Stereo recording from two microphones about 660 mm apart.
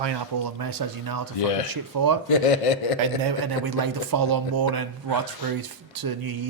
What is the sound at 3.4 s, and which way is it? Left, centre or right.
Speech, right.